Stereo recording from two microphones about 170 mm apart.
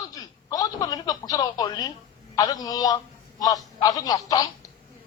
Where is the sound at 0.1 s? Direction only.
20° left (ahead or behind).